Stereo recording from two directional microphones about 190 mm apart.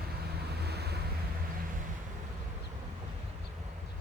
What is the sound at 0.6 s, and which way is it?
Vehicle, 60° right (ahead or behind).